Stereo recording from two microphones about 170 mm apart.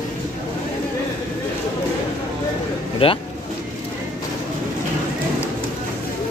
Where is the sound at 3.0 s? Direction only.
35° left (ahead or behind).